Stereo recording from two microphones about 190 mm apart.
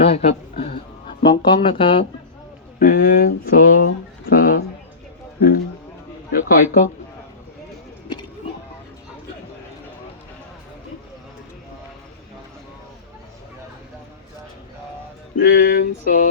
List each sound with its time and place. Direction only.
0.0 s a sound: 35° left (ahead or behind)
1.2 s speech: 25° left (ahead or behind)
2.7 s speech: 45° left (ahead or behind)
4.3 s a sound: 50° left (ahead or behind)
6.3 s speech: 50° left (ahead or behind)
15.4 s speech: 55° left (ahead or behind)